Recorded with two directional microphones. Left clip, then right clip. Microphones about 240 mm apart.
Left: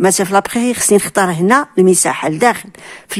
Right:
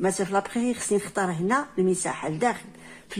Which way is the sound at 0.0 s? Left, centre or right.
Left.